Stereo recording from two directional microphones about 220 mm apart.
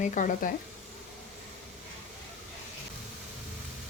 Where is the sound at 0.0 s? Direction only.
35° left (ahead or behind).